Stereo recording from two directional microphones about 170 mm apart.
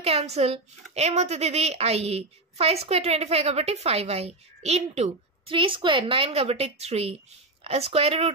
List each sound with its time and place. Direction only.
0.0 s a woman's voice: 35° right (ahead or behind)